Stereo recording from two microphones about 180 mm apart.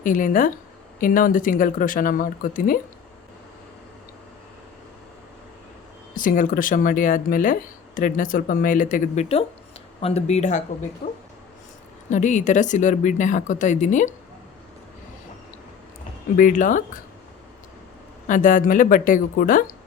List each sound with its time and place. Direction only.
0.0 s speech: 45° left (ahead or behind)
6.1 s speech: 50° left (ahead or behind)
12.0 s speech: 40° left (ahead or behind)
16.4 s speech: 45° left (ahead or behind)
18.3 s speech: 45° left (ahead or behind)